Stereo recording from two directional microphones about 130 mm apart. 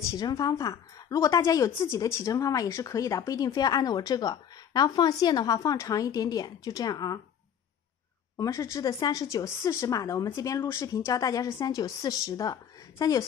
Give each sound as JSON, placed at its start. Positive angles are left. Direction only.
{"t": 0.1, "sound": "a woman's voice", "side_deg": 30}
{"t": 8.4, "sound": "a woman's voice", "side_deg": 20}